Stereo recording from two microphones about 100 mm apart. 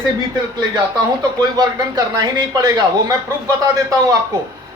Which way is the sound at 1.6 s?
40° right (ahead or behind).